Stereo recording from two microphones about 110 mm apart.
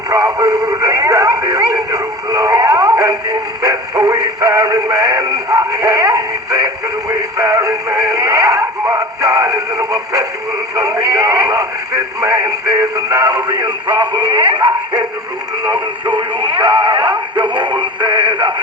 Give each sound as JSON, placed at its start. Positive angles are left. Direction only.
{"t": 0.1, "sound": "radio", "side_deg": -35}
{"t": 3.6, "sound": "synthetic singing", "side_deg": -35}
{"t": 10.8, "sound": "speech", "side_deg": -30}